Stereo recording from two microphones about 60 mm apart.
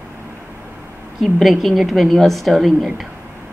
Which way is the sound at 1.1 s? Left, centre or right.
Centre.